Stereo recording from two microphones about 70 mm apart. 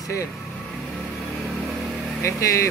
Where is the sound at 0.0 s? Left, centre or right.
Left.